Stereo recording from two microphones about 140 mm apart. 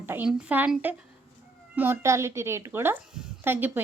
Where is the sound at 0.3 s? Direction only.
10° right (ahead or behind).